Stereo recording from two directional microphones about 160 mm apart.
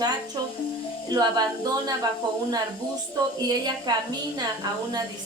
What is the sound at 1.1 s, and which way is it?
Speech, 25° right (ahead or behind).